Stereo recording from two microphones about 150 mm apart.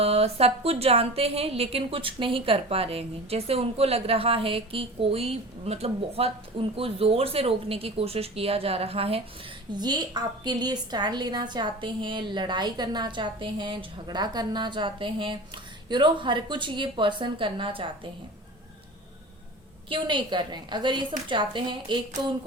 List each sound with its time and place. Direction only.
0.0 s a woman's voice: 40° right (ahead or behind)
9.7 s a woman's voice: 25° right (ahead or behind)
19.9 s a woman's voice: 30° right (ahead or behind)